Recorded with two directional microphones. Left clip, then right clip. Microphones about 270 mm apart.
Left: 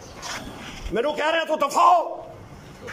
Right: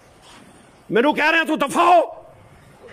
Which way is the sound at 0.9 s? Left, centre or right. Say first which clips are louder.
Right 6 dB; right.